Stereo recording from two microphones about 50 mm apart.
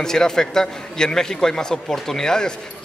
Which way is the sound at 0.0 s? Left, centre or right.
Centre.